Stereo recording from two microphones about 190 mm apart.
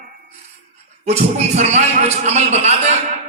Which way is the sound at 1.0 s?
35° right (ahead or behind).